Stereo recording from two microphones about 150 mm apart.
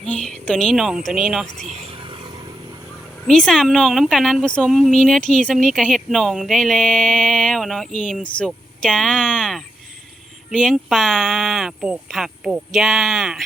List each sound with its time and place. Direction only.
0.0 s speech: 5° left (ahead or behind)
1.6 s vehicle: 50° right (ahead or behind)
2.0 s vehicle: 35° right (ahead or behind)
3.2 s speech: 5° left (ahead or behind)